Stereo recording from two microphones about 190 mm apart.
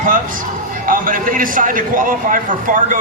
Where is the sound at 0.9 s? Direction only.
45° right (ahead or behind).